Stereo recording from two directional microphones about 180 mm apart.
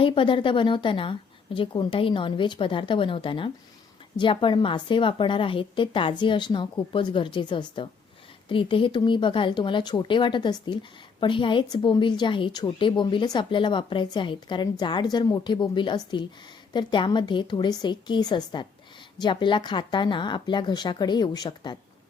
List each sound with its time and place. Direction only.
0.0 s a woman's voice: 30° left (ahead or behind)